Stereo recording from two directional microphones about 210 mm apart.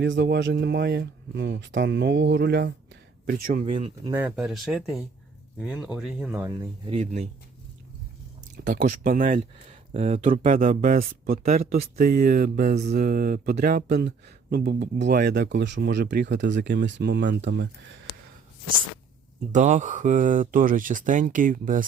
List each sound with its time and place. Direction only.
0.0 s speech: 55° right (ahead or behind)
3.2 s speech: 40° right (ahead or behind)
3.8 s speech: 25° right (ahead or behind)
4.1 s speech: 10° right (ahead or behind)
6.9 s speech: 30° right (ahead or behind)
8.5 s speech: 45° right (ahead or behind)
19.5 s speech: 35° right (ahead or behind)